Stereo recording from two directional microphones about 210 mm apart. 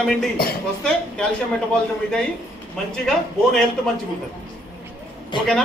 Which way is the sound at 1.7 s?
5° left (ahead or behind).